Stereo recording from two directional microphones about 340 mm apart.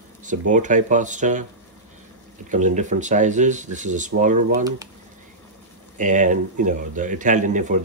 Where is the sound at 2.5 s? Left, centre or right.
Right.